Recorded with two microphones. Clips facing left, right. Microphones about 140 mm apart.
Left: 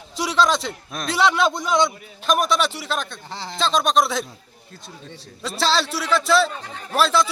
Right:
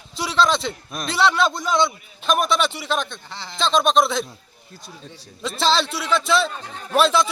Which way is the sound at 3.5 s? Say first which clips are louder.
Right 1 dB; 10° left (ahead or behind).